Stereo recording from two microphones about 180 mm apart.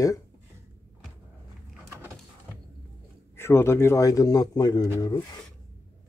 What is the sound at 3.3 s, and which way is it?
Speech, 15° left (ahead or behind).